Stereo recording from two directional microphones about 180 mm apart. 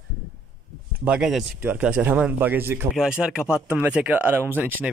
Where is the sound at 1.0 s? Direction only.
5° right (ahead or behind).